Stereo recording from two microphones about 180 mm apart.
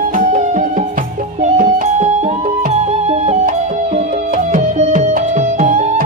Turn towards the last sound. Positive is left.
turn(degrees=-40)  # may be behind; listen again after turning